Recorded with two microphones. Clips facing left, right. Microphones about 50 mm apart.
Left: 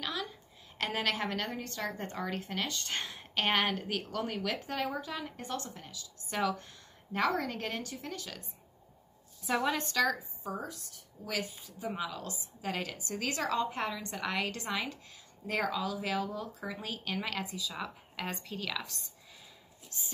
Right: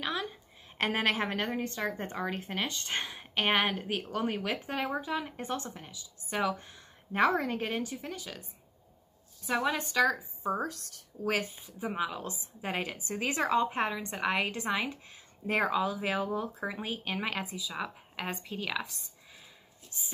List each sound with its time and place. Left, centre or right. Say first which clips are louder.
0.0 s a sound: right 3 dB; right
0.7 s a woman's voice: right 4 dB; right; by 10.1 s centre
10.1 s a woman's voice: right 6 dB; right
10.6 s a woman's voice: right 6 dB; right
11.6 s speech: right 3 dB; right